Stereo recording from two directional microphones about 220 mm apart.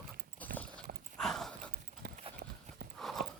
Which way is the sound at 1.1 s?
Centre (ahead or behind).